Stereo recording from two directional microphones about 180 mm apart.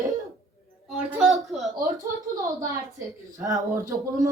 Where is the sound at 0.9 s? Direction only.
Centre (ahead or behind).